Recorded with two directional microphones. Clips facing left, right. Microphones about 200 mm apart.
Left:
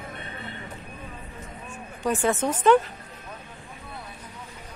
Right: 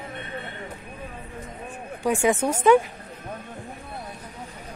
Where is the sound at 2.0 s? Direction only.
10° right (ahead or behind).